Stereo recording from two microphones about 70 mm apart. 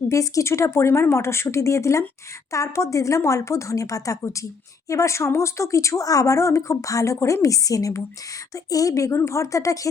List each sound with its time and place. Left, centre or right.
0.1 s speech: left